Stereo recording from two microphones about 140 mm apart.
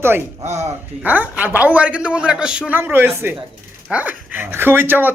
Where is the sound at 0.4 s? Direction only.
50° right (ahead or behind).